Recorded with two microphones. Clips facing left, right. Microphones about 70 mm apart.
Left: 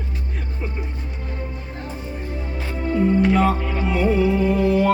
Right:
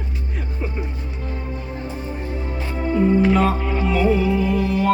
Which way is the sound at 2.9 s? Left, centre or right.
Centre.